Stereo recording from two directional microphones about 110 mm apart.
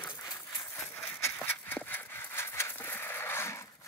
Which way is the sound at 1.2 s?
20° left (ahead or behind).